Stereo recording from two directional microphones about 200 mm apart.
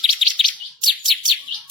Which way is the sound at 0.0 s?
Centre (ahead or behind).